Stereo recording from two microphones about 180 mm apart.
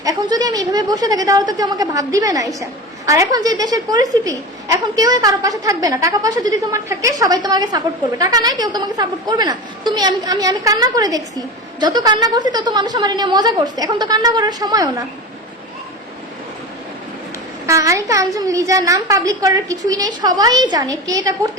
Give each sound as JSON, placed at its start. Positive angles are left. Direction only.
{"t": 0.0, "sound": "a woman's voice", "side_deg": -20}
{"t": 17.7, "sound": "a woman's voice", "side_deg": -15}